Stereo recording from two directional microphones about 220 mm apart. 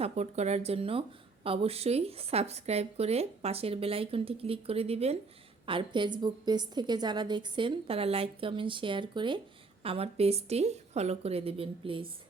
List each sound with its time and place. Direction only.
0.0 s a woman's voice: 30° right (ahead or behind)